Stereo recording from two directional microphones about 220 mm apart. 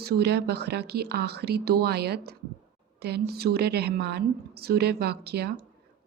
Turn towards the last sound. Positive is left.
turn(degrees=-45)  # may be behind; listen again after turning